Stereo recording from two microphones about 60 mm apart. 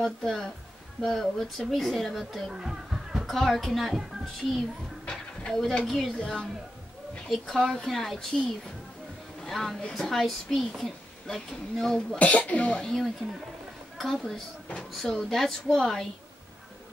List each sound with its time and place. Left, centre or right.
0.0 s speech: centre
2.5 s a sound: centre
3.3 s speech: centre
5.0 s a sound: centre
5.5 s speech: centre
6.1 s speech: centre
12.2 s speech: left
12.8 s speech: centre